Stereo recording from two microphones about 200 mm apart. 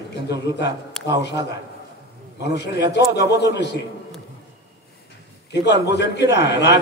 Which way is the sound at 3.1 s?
55° left (ahead or behind).